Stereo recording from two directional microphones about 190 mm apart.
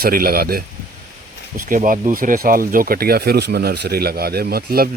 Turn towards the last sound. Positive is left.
turn(degrees=-55)  # may be behind; listen again after turning